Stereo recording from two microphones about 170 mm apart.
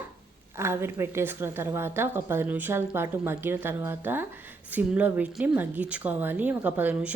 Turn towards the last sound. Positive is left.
turn(degrees=-10)  # may be behind; listen again after turning